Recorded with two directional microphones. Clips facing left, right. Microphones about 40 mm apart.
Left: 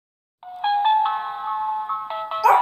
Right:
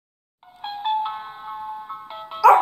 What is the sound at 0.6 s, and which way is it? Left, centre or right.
Music, left.